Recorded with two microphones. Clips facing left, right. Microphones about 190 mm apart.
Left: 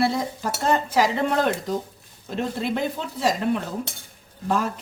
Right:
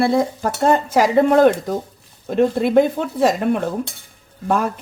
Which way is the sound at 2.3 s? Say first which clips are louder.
Right 9 dB; 55° right (ahead or behind).